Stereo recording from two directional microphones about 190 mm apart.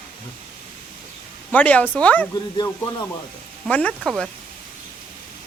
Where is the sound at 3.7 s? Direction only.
5° left (ahead or behind).